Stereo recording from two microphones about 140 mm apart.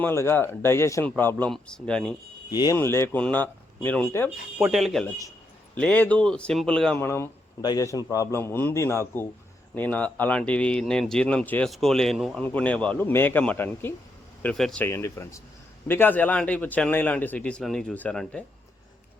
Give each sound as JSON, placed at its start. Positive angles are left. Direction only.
{"t": 0.0, "sound": "a man's voice", "side_deg": 20}
{"t": 2.5, "sound": "a man's voice", "side_deg": 25}
{"t": 2.7, "sound": "a man's voice", "side_deg": 15}
{"t": 4.5, "sound": "a man's voice", "side_deg": -5}
{"t": 7.0, "sound": "a man's voice", "side_deg": 15}
{"t": 14.8, "sound": "a man's voice", "side_deg": 20}